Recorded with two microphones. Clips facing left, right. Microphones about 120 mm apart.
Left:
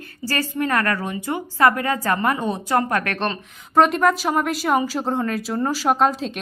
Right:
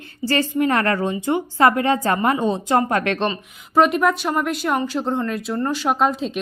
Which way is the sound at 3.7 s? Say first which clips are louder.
Even; centre (ahead or behind).